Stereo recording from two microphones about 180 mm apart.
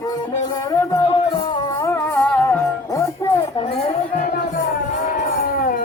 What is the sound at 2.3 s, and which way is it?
Music, 10° left (ahead or behind).